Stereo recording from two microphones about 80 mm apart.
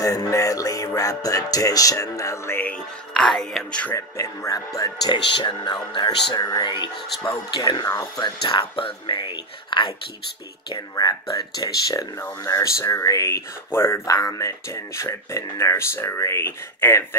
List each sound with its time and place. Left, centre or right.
0.0 s music: left
2.6 s speech: centre
3.9 s music: left
5.1 s speech: left
5.6 s speech: left
10.7 s music: left
12.4 s speech: left